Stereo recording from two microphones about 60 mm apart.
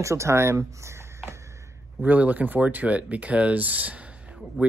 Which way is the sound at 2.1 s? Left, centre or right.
Right.